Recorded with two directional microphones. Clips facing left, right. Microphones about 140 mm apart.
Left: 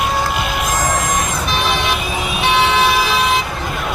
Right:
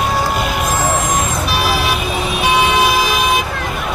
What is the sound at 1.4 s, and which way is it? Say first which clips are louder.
Vehicle: right 1 dB; 5° right (ahead or behind).